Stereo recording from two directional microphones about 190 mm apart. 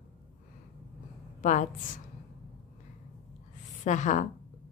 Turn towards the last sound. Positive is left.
turn(degrees=40)  # may be behind; listen again after turning